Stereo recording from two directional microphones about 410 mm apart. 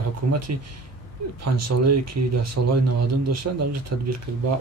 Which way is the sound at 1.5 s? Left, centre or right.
Right.